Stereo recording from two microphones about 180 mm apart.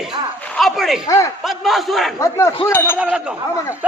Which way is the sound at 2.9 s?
5° right (ahead or behind).